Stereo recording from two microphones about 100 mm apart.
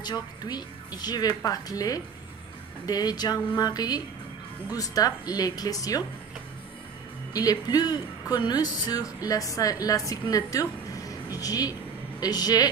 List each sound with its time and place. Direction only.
0.0 s a woman's voice: 45° left (ahead or behind)
7.3 s speech: 40° left (ahead or behind)